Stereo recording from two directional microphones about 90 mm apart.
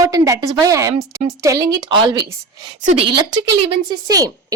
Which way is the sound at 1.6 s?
55° right (ahead or behind).